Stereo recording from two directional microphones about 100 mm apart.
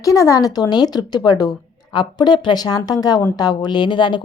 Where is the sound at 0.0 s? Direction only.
35° left (ahead or behind).